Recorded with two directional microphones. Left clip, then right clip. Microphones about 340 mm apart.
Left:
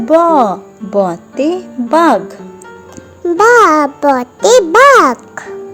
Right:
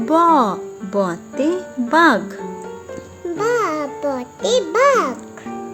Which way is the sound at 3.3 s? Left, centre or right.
Centre.